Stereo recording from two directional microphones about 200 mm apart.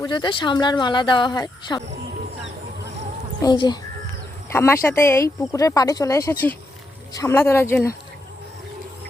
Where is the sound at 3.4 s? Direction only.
20° left (ahead or behind).